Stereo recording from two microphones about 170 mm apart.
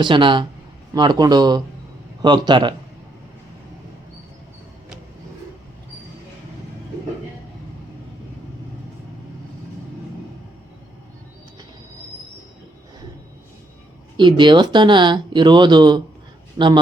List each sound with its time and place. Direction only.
0.0 s speech: 30° right (ahead or behind)
14.2 s a man's voice: 25° right (ahead or behind)